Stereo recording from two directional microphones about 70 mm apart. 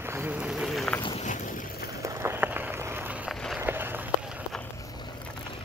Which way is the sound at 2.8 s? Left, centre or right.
Right.